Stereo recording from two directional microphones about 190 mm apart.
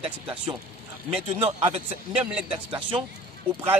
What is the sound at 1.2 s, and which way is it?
Speech, 35° right (ahead or behind).